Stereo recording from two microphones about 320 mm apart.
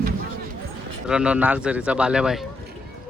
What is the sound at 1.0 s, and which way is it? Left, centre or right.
A man's voice, centre.